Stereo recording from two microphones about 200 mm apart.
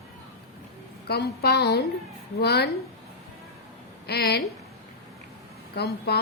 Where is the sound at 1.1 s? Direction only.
55° left (ahead or behind).